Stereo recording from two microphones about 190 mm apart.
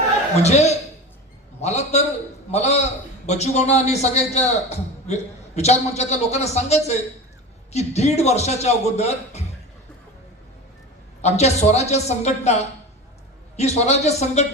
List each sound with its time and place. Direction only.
0.4 s a man's voice: 35° left (ahead or behind)
11.2 s a man's voice: 35° left (ahead or behind)